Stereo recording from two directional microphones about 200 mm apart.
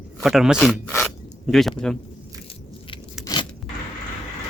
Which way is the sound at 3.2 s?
20° left (ahead or behind).